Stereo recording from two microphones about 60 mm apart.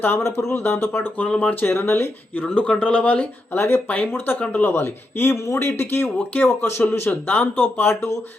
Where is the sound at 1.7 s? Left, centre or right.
Left.